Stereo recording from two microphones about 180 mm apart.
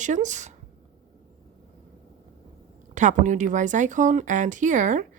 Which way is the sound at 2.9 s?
45° right (ahead or behind).